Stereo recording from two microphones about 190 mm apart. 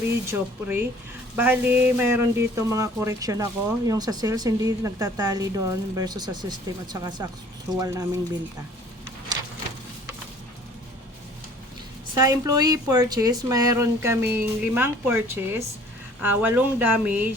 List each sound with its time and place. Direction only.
0.3 s speech: 10° right (ahead or behind)
12.1 s speech: 20° right (ahead or behind)